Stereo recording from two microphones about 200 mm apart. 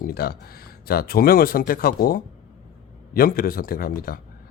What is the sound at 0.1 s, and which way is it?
Speech, 50° left (ahead or behind).